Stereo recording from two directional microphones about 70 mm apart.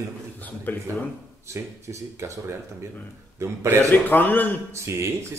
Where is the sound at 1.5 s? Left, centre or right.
Right.